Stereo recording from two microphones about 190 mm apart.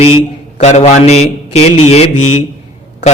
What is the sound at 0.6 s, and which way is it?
A man's voice, 35° left (ahead or behind).